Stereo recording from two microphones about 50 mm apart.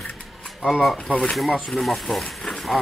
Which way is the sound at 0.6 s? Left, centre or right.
Centre.